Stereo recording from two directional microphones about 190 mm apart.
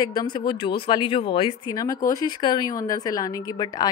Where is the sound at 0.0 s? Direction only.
20° left (ahead or behind).